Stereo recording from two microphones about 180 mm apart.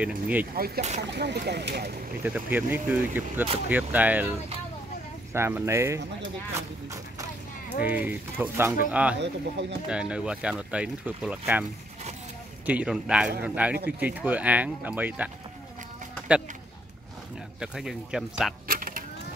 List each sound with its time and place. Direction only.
0.0 s speech: 10° right (ahead or behind)
0.7 s speech: 40° right (ahead or behind)
1.1 s speech: 70° right (ahead or behind)
2.2 s speech: 10° right (ahead or behind)
9.2 s speech: 75° right (ahead or behind)
9.8 s speech: 5° right (ahead or behind)
12.6 s a man's voice: 10° right (ahead or behind)
17.6 s speech: 5° right (ahead or behind)
18.7 s a sound: 50° right (ahead or behind)